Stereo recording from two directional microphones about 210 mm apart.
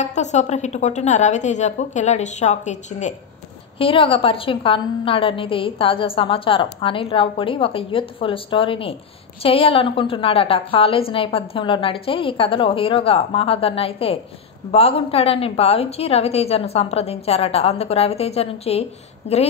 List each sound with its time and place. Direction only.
0.0 s a woman's voice: 35° left (ahead or behind)